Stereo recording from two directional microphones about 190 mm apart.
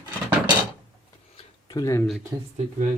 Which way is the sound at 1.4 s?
25° left (ahead or behind).